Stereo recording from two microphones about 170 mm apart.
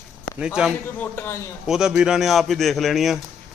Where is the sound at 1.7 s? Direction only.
5° right (ahead or behind).